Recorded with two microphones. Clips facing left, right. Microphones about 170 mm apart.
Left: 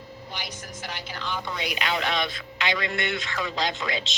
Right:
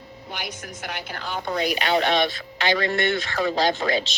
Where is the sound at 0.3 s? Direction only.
55° right (ahead or behind); by 4.0 s 40° right (ahead or behind).